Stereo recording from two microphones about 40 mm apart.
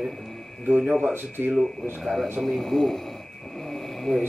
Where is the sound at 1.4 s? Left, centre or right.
Right.